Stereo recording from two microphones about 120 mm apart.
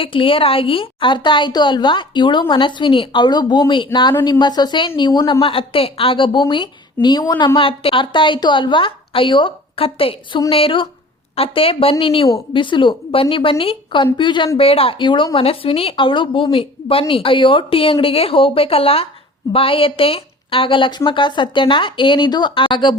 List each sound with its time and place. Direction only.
0.0 s a woman's voice: 45° left (ahead or behind)
14.6 s a woman's voice: 50° left (ahead or behind)